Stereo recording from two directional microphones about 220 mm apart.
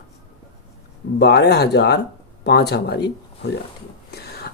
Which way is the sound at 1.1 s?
50° left (ahead or behind).